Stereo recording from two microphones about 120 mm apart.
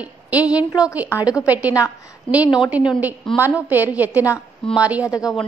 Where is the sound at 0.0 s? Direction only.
10° right (ahead or behind).